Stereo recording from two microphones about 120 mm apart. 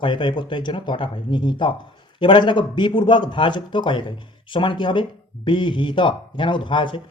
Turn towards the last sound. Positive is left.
turn(degrees=45)  # may be behind; listen again after turning